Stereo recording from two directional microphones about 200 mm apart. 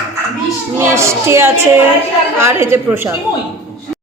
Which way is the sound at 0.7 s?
15° right (ahead or behind).